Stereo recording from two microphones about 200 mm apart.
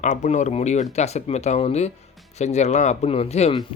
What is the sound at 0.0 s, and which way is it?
Speech, 35° left (ahead or behind).